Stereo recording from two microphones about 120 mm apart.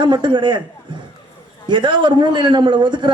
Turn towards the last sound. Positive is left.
turn(degrees=-40)  # may be behind; listen again after turning